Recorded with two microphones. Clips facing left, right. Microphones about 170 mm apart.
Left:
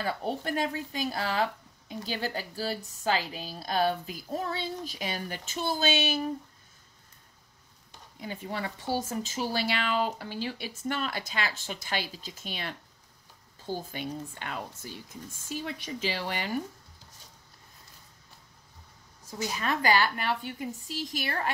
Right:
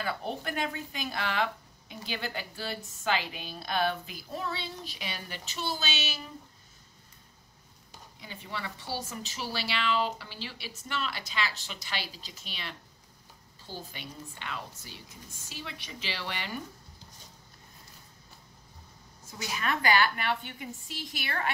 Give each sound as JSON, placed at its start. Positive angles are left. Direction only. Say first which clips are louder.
{"t": 0.0, "sound": "a woman's voice", "louder": "left 3 dB", "side_deg": 35}
{"t": 8.2, "sound": "speech", "louder": "left 5 dB", "side_deg": 45}
{"t": 19.3, "sound": "a woman's voice", "louder": "left 2 dB", "side_deg": 35}